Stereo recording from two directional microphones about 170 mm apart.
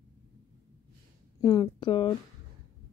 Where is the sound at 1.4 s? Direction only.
30° left (ahead or behind).